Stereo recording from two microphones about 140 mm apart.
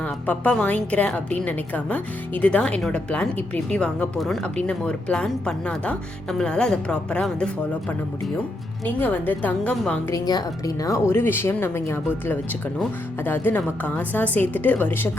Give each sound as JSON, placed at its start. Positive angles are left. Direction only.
{"t": 0.0, "sound": "a woman's voice", "side_deg": 10}
{"t": 10.2, "sound": "a woman's voice", "side_deg": 25}